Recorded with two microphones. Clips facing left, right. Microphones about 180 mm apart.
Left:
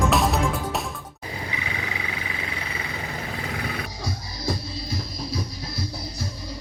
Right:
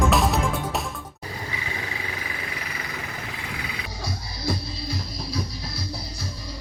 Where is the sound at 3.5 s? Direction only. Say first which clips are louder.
Left 5 dB; 55° left (ahead or behind).